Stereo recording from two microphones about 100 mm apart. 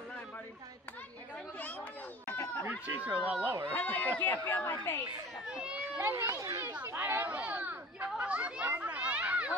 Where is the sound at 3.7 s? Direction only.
20° left (ahead or behind).